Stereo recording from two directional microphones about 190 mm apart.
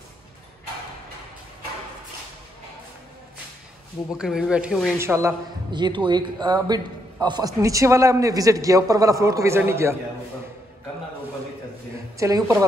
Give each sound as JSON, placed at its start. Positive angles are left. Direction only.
{"t": 4.2, "sound": "speech", "side_deg": -5}
{"t": 4.9, "sound": "a man's voice", "side_deg": -15}
{"t": 12.2, "sound": "a man's voice", "side_deg": -20}